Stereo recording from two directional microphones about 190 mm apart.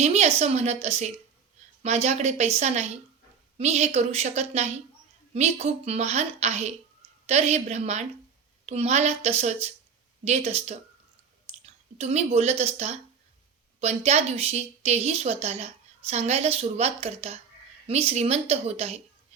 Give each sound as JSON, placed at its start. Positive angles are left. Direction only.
{"t": 0.0, "sound": "a woman's voice", "side_deg": -35}